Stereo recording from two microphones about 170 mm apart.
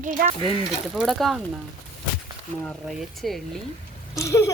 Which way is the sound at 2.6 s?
Centre (ahead or behind).